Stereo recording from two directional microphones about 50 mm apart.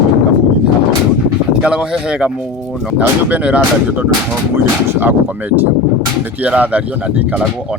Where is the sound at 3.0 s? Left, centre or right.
Right.